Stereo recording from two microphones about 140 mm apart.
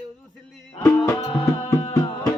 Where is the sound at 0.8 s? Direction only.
15° left (ahead or behind).